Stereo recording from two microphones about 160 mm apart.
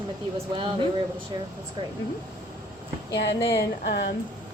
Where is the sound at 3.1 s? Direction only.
90° left.